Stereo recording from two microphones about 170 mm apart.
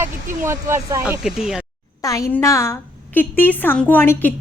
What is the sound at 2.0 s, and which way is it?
A woman's voice, 20° left (ahead or behind).